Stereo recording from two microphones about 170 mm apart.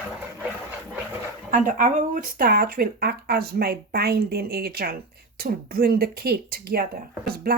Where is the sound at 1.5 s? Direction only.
50° right (ahead or behind).